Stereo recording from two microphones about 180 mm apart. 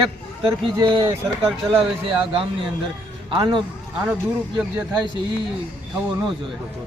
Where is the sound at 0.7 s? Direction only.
25° right (ahead or behind).